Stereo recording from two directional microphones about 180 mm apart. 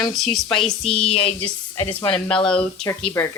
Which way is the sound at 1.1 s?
30° left (ahead or behind).